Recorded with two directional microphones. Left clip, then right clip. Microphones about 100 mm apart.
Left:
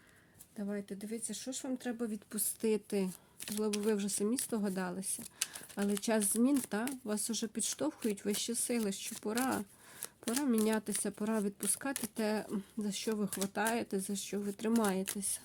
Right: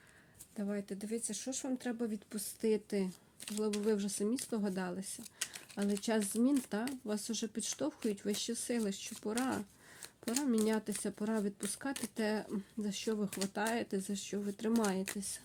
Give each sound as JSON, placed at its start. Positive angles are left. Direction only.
{"t": 0.5, "sound": "speech", "side_deg": -10}
{"t": 2.1, "sound": "speech", "side_deg": 35}